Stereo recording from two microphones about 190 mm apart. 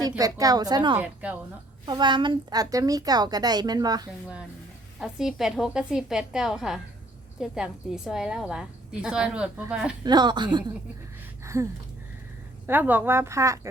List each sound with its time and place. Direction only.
0.2 s a woman's voice: 20° right (ahead or behind)
0.9 s speech: 10° right (ahead or behind)
1.9 s a woman's voice: 25° right (ahead or behind)
4.9 s a woman's voice: centre (ahead or behind)
10.0 s a woman's voice: 20° right (ahead or behind)
11.4 s a sound: 15° right (ahead or behind)
12.6 s speech: 10° right (ahead or behind)